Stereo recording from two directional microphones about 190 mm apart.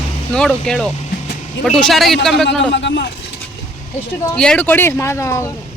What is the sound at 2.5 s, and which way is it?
Speech, 65° left (ahead or behind).